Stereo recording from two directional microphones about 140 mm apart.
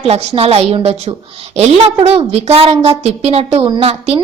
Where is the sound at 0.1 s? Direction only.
50° right (ahead or behind).